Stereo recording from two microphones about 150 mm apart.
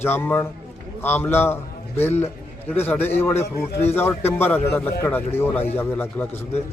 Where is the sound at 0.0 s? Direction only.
15° left (ahead or behind).